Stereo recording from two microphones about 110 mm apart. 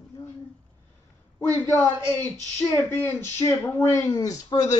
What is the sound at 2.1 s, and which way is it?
Speech, 25° left (ahead or behind).